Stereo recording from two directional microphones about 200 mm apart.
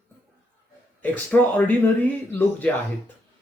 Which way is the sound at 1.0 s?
10° left (ahead or behind).